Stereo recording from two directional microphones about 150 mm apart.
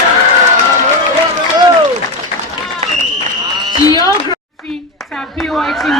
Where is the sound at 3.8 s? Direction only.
25° left (ahead or behind).